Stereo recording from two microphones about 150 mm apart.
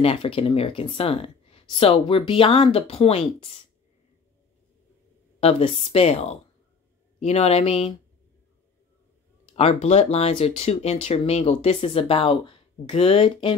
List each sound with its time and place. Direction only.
0.0 s speech: 40° left (ahead or behind)
5.4 s speech: 40° left (ahead or behind)
9.5 s speech: 40° left (ahead or behind)